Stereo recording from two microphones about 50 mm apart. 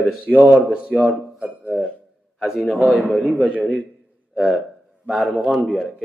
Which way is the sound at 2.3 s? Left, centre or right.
Centre.